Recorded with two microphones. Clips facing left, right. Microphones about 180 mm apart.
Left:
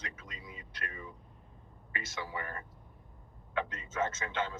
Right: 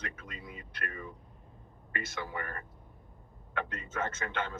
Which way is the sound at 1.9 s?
55° right (ahead or behind).